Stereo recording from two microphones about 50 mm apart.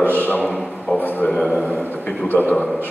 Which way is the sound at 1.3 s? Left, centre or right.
Centre.